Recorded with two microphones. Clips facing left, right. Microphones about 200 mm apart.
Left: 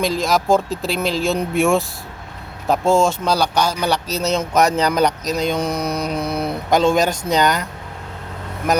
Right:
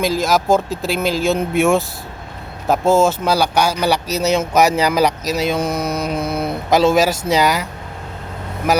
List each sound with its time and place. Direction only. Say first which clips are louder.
0.0 s speech: right 2 dB; centre (ahead or behind)